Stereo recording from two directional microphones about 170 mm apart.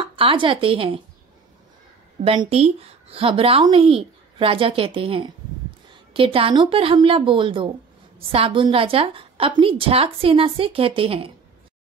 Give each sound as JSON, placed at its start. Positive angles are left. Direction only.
{"t": 0.0, "sound": "speech", "side_deg": -30}
{"t": 2.2, "sound": "a woman's voice", "side_deg": -35}